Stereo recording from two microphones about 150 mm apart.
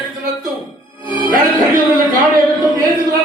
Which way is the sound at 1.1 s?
35° left (ahead or behind).